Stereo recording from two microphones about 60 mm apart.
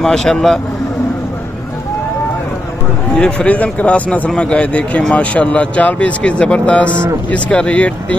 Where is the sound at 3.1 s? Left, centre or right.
Centre.